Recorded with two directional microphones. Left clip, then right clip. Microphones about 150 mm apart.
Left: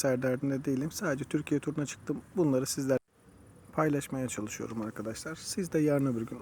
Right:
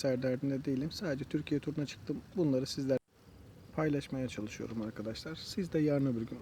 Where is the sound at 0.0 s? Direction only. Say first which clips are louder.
Left 4 dB; 25° left (ahead or behind).